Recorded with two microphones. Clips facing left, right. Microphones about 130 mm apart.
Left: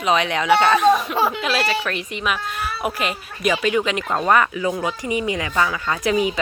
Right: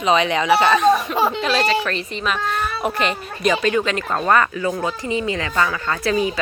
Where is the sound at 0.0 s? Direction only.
Centre (ahead or behind).